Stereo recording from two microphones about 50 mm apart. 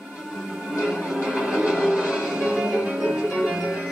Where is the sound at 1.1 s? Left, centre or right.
Centre.